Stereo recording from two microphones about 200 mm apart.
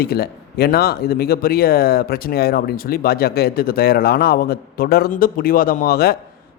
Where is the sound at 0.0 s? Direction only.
50° left (ahead or behind).